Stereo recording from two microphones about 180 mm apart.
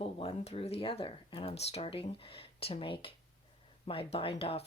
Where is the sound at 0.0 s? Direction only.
30° left (ahead or behind).